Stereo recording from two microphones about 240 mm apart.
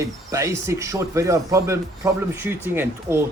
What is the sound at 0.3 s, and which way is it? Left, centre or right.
Speech, centre.